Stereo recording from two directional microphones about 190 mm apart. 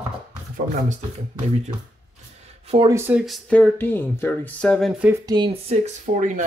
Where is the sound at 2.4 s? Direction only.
30° right (ahead or behind).